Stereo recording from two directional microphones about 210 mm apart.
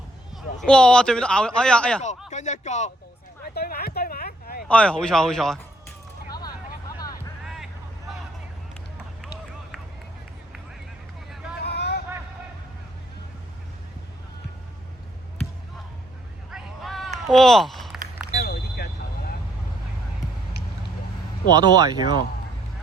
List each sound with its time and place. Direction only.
0.6 s a man's voice: 5° left (ahead or behind)
2.3 s speech: 35° left (ahead or behind)
3.5 s a sound: 45° left (ahead or behind)
4.7 s a man's voice: 5° left (ahead or behind)
6.3 s vehicle: 20° left (ahead or behind)
7.4 s vehicle: centre (ahead or behind)
11.6 s vehicle: 50° left (ahead or behind)
16.5 s hubbub: centre (ahead or behind)
17.2 s a sound: centre (ahead or behind)
18.3 s a sound: 50° left (ahead or behind)
21.6 s speech: 20° right (ahead or behind)